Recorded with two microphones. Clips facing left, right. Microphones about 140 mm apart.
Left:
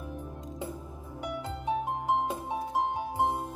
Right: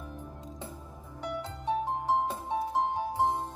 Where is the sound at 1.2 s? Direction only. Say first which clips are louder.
Even; 10° left (ahead or behind).